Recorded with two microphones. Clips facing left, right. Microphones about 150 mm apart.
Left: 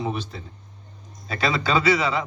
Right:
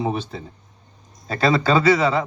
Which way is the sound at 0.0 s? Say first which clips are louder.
Right 4 dB; 25° right (ahead or behind).